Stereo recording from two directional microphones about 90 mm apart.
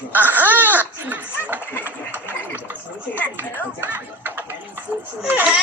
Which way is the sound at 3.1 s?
15° left (ahead or behind).